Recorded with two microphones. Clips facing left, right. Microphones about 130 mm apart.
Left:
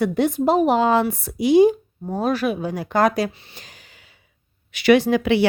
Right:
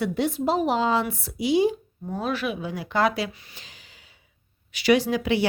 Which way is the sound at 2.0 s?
40° left (ahead or behind).